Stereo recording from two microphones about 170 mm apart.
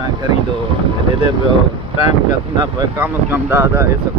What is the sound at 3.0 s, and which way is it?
Speech, 10° right (ahead or behind).